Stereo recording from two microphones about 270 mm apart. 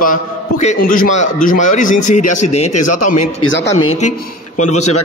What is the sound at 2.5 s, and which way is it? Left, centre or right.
Speech, left.